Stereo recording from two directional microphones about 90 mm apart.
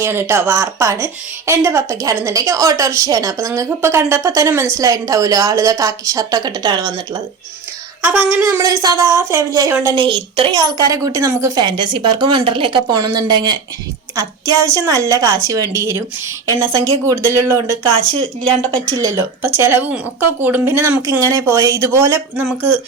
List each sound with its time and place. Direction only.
0.0 s speech: 30° right (ahead or behind)
0.9 s speech: 20° right (ahead or behind)
1.6 s a woman's voice: 35° right (ahead or behind)
8.0 s speech: 20° right (ahead or behind)
8.4 s a woman's voice: 35° right (ahead or behind)
9.9 s a woman's voice: 70° right (ahead or behind)
10.6 s a woman's voice: 40° right (ahead or behind)
11.5 s a woman's voice: 55° right (ahead or behind)
12.9 s a woman's voice: 45° right (ahead or behind)
19.1 s speech: 25° right (ahead or behind)
21.1 s a woman's voice: 35° right (ahead or behind)